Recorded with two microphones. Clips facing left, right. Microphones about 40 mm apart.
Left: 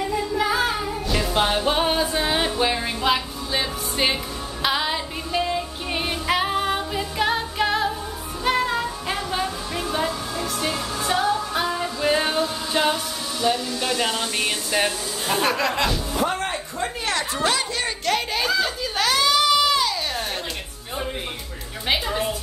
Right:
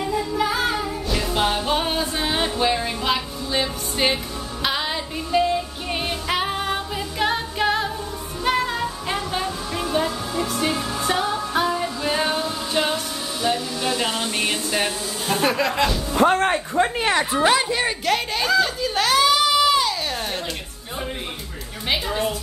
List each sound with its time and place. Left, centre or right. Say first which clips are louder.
0.4 s music: left 1 dB; centre
4.6 s female singing: left 2 dB; centre
8.5 s music: even; centre
13.4 s hair dryer: left 1 dB; centre
13.9 s speech: even; centre
14.8 s speech: left 1 dB; centre
16.2 s speech: right 9 dB; right
17.0 s speech: right 5 dB; right
18.0 s a sound: right 1 dB; centre
21.8 s music: even; centre